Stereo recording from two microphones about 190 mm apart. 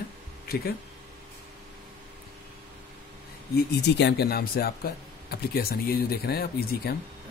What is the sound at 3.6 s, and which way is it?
Speech, 60° left (ahead or behind).